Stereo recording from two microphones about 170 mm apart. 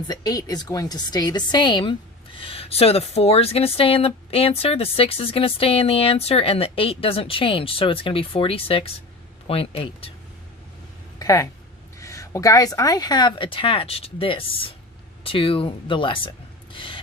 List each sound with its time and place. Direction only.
0.1 s a woman's voice: 20° left (ahead or behind)
11.2 s a woman's voice: 20° left (ahead or behind)
16.7 s rub: 30° left (ahead or behind)